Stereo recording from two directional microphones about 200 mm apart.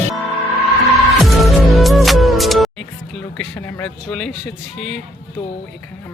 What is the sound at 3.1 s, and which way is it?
Speech, 5° left (ahead or behind).